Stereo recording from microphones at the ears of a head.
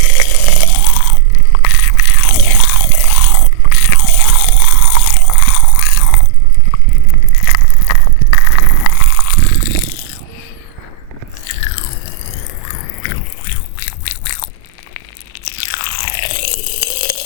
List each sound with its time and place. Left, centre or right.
0.0 s crunch: left
6.7 s a sound: left
11.4 s biting: left
15.4 s crunch: left